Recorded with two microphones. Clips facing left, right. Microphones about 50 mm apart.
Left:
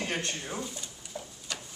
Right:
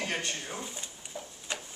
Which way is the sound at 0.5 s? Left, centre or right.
Right.